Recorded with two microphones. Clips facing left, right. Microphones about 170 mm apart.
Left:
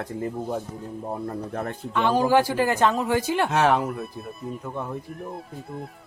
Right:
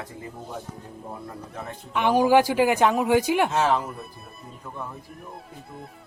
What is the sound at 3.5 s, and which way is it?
Speech, 65° left (ahead or behind).